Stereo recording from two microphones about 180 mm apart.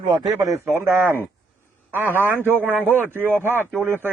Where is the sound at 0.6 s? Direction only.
10° right (ahead or behind).